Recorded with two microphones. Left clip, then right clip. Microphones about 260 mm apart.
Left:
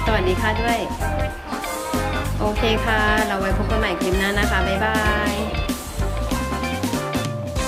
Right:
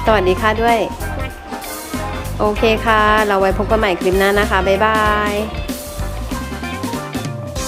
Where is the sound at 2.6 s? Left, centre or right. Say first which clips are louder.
Right 6 dB; centre.